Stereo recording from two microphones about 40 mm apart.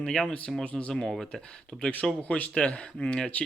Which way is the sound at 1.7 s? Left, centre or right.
Centre.